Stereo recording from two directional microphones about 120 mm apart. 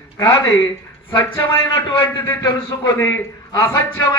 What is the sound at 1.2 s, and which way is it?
A man's voice, 20° left (ahead or behind).